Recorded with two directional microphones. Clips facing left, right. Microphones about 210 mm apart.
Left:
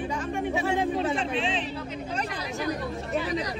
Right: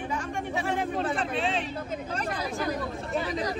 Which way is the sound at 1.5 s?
45° right (ahead or behind).